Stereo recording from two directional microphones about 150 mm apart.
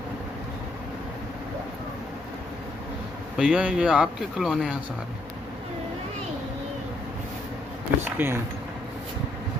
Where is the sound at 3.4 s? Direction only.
5° right (ahead or behind).